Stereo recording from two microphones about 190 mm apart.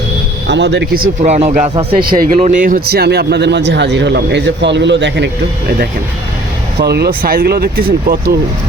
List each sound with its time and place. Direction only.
0.4 s speech: 65° right (ahead or behind); by 1.7 s 40° right (ahead or behind)
2.0 s speech: 50° right (ahead or behind)